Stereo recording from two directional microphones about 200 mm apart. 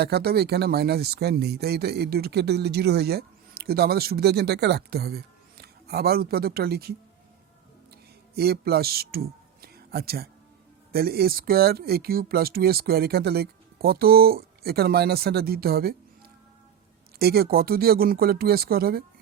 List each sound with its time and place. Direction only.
0.0 s speech: 50° right (ahead or behind)
8.4 s speech: 50° right (ahead or behind)
17.2 s speech: 50° right (ahead or behind)